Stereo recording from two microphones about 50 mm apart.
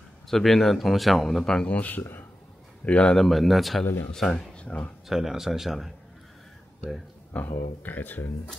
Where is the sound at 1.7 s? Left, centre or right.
Left.